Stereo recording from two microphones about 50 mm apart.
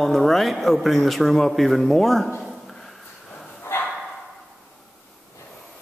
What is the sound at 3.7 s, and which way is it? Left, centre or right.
Dog, left.